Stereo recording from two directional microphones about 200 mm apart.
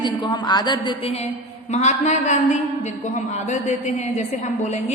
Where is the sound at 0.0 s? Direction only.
20° left (ahead or behind).